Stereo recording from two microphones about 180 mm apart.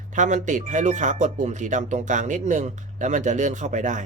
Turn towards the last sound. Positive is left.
turn(degrees=-45)  # may be behind; listen again after turning